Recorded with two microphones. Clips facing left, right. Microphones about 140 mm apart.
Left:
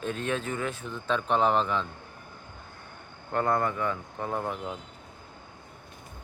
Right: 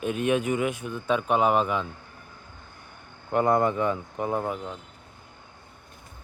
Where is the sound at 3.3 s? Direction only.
15° right (ahead or behind).